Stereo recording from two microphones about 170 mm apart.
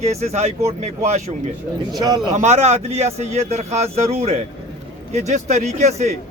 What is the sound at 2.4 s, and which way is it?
Speech, 40° right (ahead or behind).